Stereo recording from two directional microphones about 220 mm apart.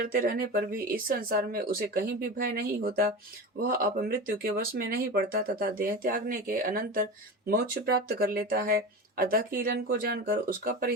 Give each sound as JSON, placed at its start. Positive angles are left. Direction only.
{"t": 0.0, "sound": "speech", "side_deg": -40}